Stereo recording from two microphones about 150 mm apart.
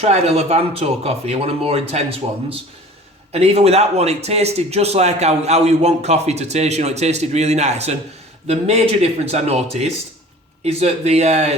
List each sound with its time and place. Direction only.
0.0 s a man's voice: 45° right (ahead or behind)